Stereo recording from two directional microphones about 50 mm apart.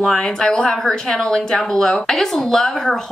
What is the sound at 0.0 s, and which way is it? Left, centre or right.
A woman's voice, centre.